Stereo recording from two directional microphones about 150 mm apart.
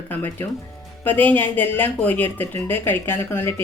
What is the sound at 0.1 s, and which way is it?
Speech, 15° left (ahead or behind).